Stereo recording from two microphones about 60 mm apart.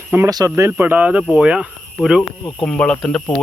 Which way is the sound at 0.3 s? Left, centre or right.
Right.